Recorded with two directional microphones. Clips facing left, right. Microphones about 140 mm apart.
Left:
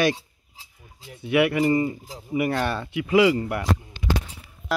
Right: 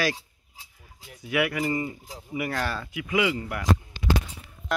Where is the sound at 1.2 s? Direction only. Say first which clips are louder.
Left 6 dB; 25° left (ahead or behind).